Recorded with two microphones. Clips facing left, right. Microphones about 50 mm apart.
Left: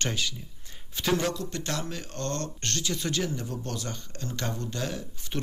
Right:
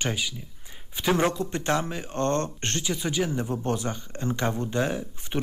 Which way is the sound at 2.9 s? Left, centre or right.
Centre.